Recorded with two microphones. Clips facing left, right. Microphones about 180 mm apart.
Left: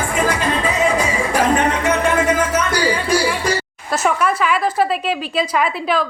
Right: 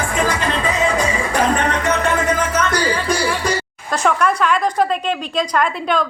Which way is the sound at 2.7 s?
5° left (ahead or behind).